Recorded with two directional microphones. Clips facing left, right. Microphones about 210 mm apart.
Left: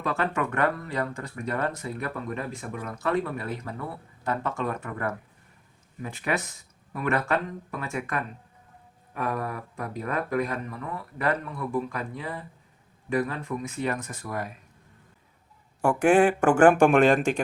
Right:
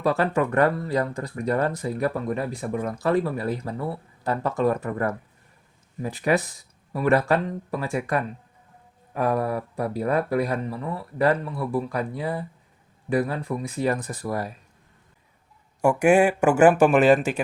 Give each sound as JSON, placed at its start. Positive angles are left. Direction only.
{"t": 0.0, "sound": "speech", "side_deg": -35}
{"t": 15.8, "sound": "speech", "side_deg": -10}